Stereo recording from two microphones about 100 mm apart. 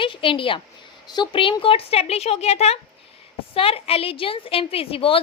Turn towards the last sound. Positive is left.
turn(degrees=65)  # may be behind; listen again after turning